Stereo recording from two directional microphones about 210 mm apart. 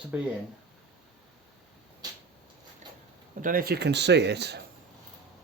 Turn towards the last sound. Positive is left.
turn(degrees=-55)  # may be behind; listen again after turning